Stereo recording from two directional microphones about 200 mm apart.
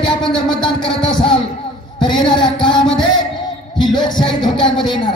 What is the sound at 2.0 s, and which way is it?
Music, 20° left (ahead or behind).